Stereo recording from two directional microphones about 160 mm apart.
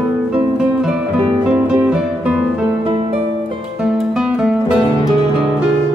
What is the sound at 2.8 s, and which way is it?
Music, 35° right (ahead or behind).